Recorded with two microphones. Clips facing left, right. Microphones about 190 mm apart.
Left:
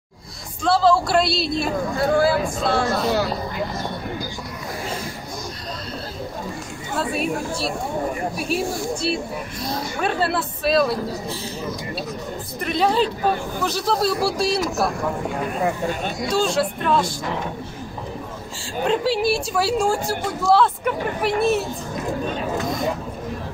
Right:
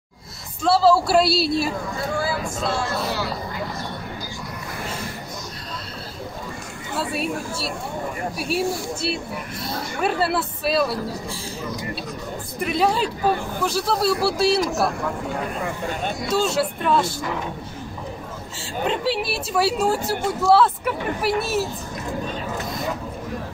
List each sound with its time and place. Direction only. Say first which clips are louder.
0.6 s speech: right 1 dB; 5° right (ahead or behind)
2.0 s speech: left 8 dB; 55° left (ahead or behind)
8.4 s speech: right 4 dB; 5° right (ahead or behind)
12.5 s speech: left 1 dB; 5° right (ahead or behind)
16.3 s speech: left 1 dB; 5° right (ahead or behind)
18.9 s speech: left 4 dB; centre (ahead or behind)